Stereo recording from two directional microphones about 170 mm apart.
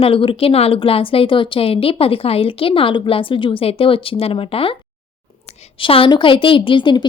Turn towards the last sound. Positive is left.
turn(degrees=25)  # may be behind; listen again after turning